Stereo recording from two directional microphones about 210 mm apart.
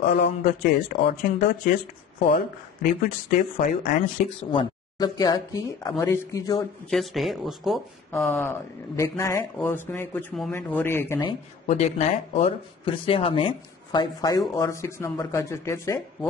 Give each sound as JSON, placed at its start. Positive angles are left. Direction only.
{"t": 0.1, "sound": "speech", "side_deg": 40}
{"t": 2.3, "sound": "speech", "side_deg": 40}
{"t": 4.5, "sound": "a man's voice", "side_deg": 20}
{"t": 6.9, "sound": "speech", "side_deg": 0}
{"t": 8.1, "sound": "a man's voice", "side_deg": 10}
{"t": 11.6, "sound": "a man's voice", "side_deg": 30}